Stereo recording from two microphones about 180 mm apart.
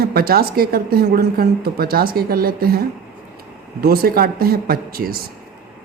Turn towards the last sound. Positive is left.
turn(degrees=-55)  # may be behind; listen again after turning